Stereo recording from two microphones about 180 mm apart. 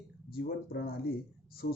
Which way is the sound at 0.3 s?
60° left (ahead or behind).